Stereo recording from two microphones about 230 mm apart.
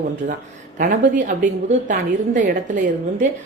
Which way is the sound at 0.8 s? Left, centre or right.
Right.